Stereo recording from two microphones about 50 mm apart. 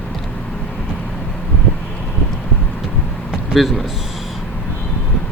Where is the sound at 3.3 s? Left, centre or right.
Centre.